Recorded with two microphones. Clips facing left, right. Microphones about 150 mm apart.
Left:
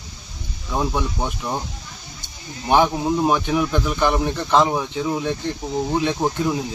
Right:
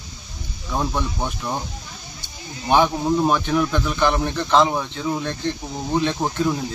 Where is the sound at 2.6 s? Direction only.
10° left (ahead or behind).